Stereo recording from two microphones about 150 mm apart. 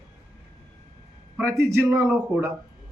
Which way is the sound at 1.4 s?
20° right (ahead or behind).